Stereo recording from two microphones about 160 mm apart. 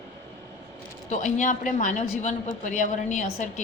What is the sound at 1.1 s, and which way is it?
A woman's voice, 50° left (ahead or behind).